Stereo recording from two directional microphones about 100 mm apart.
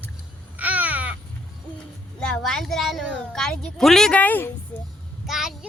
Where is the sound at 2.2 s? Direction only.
5° left (ahead or behind).